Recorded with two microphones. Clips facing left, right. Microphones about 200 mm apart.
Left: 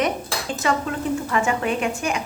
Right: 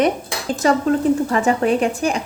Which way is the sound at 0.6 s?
35° right (ahead or behind).